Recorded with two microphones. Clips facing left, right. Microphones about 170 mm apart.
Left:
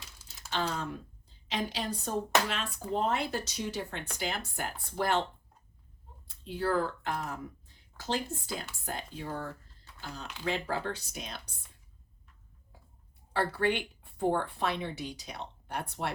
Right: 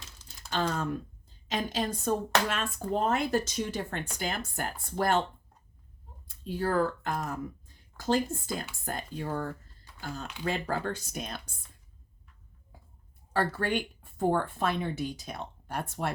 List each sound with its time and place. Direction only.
0.5 s speech: 45° right (ahead or behind)
6.2 s speech: 45° right (ahead or behind)
13.3 s speech: 45° right (ahead or behind)